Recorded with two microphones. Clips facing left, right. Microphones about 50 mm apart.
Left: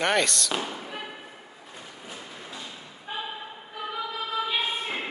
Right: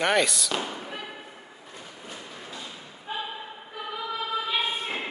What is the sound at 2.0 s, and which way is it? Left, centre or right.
Thump, centre.